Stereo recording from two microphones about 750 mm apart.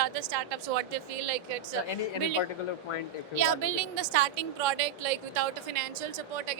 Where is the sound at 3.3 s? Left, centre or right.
Right.